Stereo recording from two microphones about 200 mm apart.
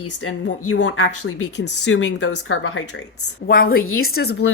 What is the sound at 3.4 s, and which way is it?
Speech, 50° left (ahead or behind).